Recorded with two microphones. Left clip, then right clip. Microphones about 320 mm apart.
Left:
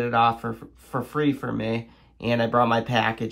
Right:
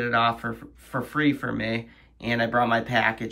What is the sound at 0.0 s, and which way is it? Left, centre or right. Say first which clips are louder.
Speech: left 2 dB; centre.